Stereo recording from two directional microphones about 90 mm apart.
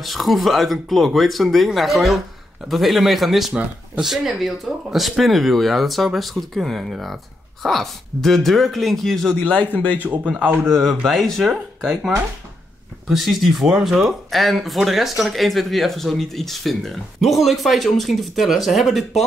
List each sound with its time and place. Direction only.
0.0 s speech: centre (ahead or behind)
9.4 s speech: 15° left (ahead or behind)
10.0 s a man's voice: 15° right (ahead or behind)
10.7 s speech: 5° left (ahead or behind)
13.1 s speech: centre (ahead or behind)